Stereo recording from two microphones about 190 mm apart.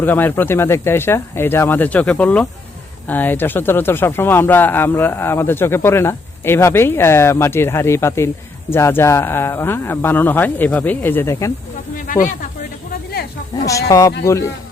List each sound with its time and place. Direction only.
0.0 s speech: 10° left (ahead or behind)
12.0 s speech: 45° left (ahead or behind)
13.7 s speech: 15° left (ahead or behind)